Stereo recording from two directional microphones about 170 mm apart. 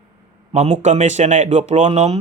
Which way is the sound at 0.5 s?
40° right (ahead or behind).